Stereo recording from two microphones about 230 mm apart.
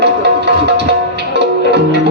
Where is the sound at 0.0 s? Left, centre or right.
Right.